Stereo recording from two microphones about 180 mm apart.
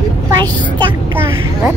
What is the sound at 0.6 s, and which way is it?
Speech, 25° right (ahead or behind).